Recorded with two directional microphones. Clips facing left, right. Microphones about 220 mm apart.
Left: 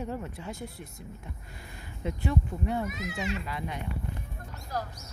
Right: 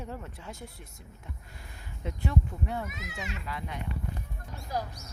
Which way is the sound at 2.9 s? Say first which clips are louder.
Left 7 dB; 35° left (ahead or behind).